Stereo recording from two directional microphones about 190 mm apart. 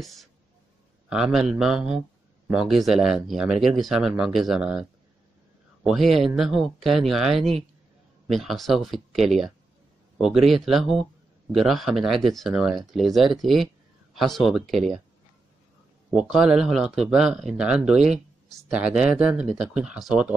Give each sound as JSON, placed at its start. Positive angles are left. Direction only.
{"t": 0.0, "sound": "a sound", "side_deg": 0}
{"t": 1.0, "sound": "speech", "side_deg": -5}
{"t": 5.9, "sound": "speech", "side_deg": 0}
{"t": 16.1, "sound": "speech", "side_deg": 0}